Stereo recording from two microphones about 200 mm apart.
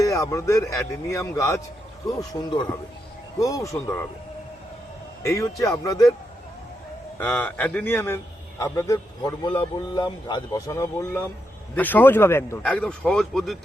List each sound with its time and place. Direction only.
0.0 s a man's voice: 15° left (ahead or behind)
5.2 s a man's voice: 15° left (ahead or behind)
7.2 s a man's voice: 10° left (ahead or behind)